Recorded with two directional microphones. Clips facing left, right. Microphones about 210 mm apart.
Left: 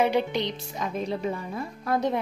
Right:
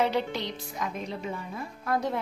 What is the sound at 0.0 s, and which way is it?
Speech, 15° left (ahead or behind).